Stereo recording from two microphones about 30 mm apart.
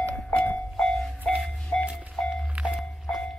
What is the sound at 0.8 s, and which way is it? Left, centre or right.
Vehicle, centre.